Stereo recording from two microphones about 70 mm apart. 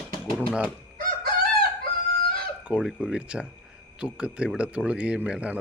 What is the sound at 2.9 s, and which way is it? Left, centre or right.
Speech, centre.